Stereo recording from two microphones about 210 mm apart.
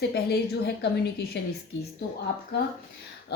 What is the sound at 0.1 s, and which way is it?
Speech, 50° left (ahead or behind).